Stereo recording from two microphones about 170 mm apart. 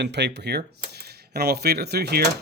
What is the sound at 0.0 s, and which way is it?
Speech, 90° right.